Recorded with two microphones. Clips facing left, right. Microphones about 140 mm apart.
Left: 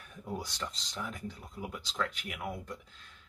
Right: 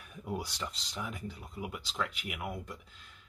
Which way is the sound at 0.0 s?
10° right (ahead or behind).